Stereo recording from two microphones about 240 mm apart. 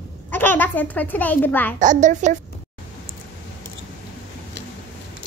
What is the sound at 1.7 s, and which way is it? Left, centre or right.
Speech, right.